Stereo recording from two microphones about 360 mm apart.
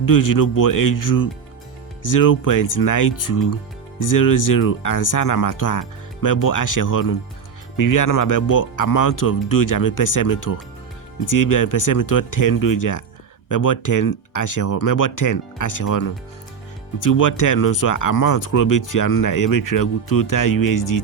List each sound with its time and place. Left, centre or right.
0.0 s speech: left